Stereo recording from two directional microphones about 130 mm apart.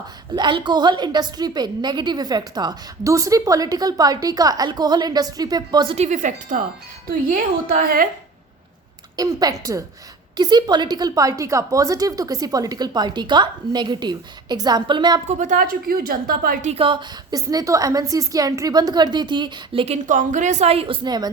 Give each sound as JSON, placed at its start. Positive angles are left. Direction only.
{"t": 0.3, "sound": "a woman's voice", "side_deg": -35}
{"t": 6.0, "sound": "speech", "side_deg": -70}
{"t": 7.1, "sound": "a woman's voice", "side_deg": -90}
{"t": 9.1, "sound": "a woman's voice", "side_deg": -30}
{"t": 15.3, "sound": "a woman's voice", "side_deg": -80}
{"t": 16.7, "sound": "a woman's voice", "side_deg": -40}
{"t": 17.3, "sound": "a woman's voice", "side_deg": -25}
{"t": 20.1, "sound": "a woman's voice", "side_deg": -75}